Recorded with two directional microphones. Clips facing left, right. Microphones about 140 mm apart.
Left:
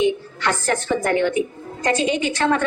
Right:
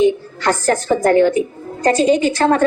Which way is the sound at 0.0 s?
40° right (ahead or behind).